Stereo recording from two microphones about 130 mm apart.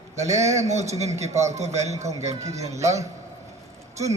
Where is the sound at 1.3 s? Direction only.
25° right (ahead or behind).